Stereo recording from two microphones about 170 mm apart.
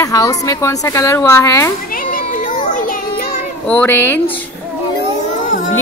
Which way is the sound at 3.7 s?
10° left (ahead or behind).